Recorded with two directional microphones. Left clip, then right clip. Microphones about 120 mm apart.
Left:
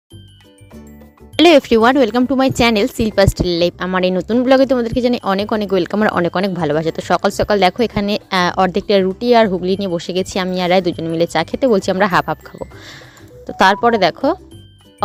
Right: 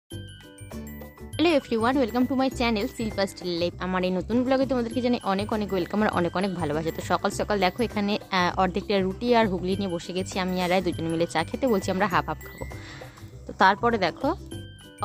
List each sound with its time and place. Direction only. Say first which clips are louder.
1.4 s speech: left 13 dB; 75° left (ahead or behind)
3.8 s speech: left 10 dB; 60° left (ahead or behind)
6.0 s speech: left 9 dB; 55° left (ahead or behind)
13.5 s speech: left 9 dB; 55° left (ahead or behind)